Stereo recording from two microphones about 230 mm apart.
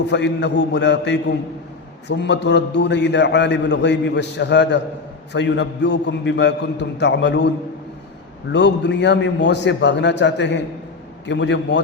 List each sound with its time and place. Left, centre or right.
0.1 s a man's voice: left
8.5 s a man's voice: left